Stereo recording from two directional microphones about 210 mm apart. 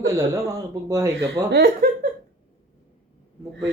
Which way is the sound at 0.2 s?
15° right (ahead or behind).